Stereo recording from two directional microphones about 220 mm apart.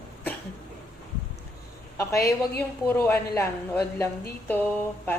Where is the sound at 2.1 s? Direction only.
45° left (ahead or behind).